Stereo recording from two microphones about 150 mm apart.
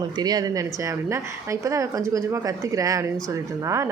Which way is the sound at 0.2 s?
25° right (ahead or behind).